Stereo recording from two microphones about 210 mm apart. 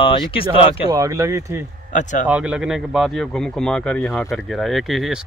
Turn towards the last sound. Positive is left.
turn(degrees=0)  # may be behind; listen again after turning